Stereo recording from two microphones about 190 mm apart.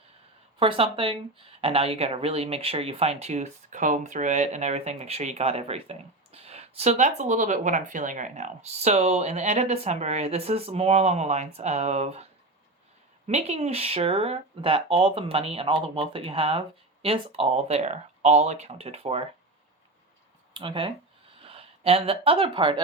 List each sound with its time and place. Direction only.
0.6 s speech: 30° right (ahead or behind)
20.6 s speech: 25° right (ahead or behind)